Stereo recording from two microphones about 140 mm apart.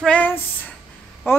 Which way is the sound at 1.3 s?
15° left (ahead or behind).